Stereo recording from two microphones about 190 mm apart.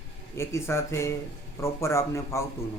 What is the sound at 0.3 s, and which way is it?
A man's voice, 15° left (ahead or behind).